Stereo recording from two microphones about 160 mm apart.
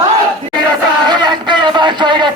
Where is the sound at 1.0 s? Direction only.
30° right (ahead or behind).